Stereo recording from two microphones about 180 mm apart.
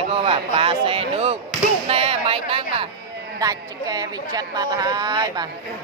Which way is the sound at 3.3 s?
20° right (ahead or behind).